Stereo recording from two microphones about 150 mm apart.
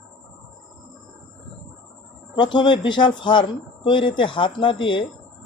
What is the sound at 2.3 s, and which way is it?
Speech, 30° left (ahead or behind).